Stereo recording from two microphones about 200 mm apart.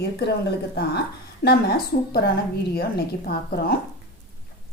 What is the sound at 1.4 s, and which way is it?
Speech, 50° left (ahead or behind).